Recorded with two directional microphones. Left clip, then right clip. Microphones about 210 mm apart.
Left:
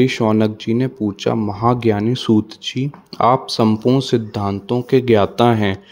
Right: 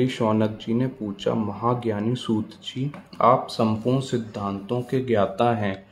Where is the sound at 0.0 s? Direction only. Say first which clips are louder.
Left 7 dB; 35° left (ahead or behind).